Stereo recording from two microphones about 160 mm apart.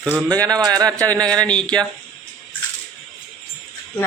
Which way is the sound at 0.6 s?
25° right (ahead or behind).